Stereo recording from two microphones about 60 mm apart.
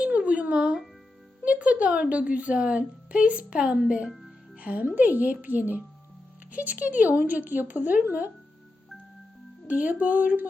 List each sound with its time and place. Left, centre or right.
0.0 s music: right
1.5 s a woman's voice: right
9.6 s a woman's voice: right